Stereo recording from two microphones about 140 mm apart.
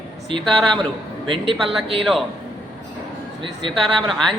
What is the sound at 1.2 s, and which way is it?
Speech, 40° right (ahead or behind).